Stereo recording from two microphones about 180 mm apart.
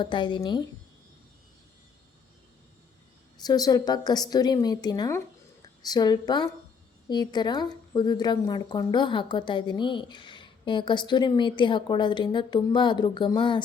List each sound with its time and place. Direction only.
0.0 s a woman's voice: 25° left (ahead or behind)
3.3 s a woman's voice: 20° left (ahead or behind)